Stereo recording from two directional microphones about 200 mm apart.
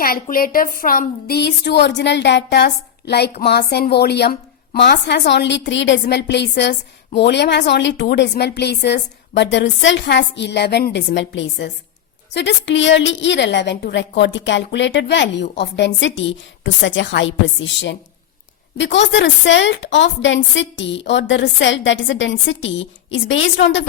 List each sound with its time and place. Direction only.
0.0 s a woman's voice: 45° left (ahead or behind); by 23.8 s 65° left (ahead or behind)